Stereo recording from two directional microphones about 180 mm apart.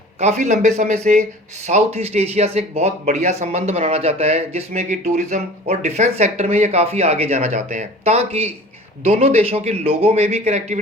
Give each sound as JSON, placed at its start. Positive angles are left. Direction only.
{"t": 0.2, "sound": "speech", "side_deg": -40}